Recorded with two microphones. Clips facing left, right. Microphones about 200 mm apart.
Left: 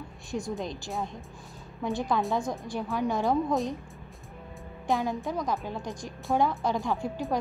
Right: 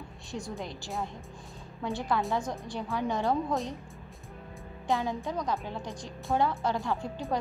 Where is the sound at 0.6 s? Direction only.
15° left (ahead or behind).